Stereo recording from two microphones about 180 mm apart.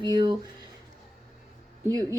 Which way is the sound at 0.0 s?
25° right (ahead or behind).